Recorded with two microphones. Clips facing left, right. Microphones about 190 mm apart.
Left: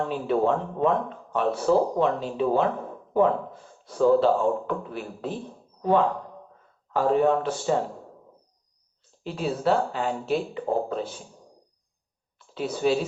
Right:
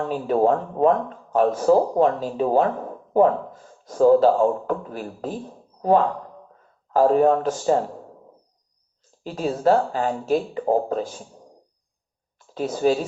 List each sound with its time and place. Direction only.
0.1 s speech: 40° right (ahead or behind)
6.9 s speech: 40° right (ahead or behind)
9.2 s speech: 40° right (ahead or behind)
12.5 s speech: 40° right (ahead or behind)